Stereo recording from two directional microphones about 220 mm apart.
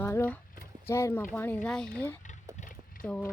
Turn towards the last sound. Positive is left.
turn(degrees=5)  # may be behind; listen again after turning